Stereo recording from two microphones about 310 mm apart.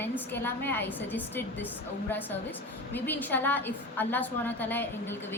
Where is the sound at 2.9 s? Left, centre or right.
Centre.